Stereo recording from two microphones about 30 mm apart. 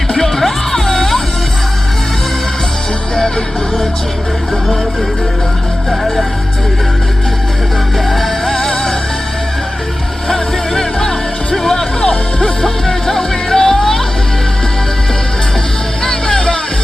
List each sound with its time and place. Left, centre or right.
0.2 s music: centre
3.2 s music: centre
5.9 s music: centre
7.9 s music: centre
10.2 s music: centre
11.9 s music: left
12.4 s music: centre
16.0 s music: centre